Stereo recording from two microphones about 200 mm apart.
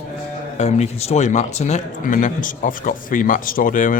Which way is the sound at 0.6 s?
35° left (ahead or behind).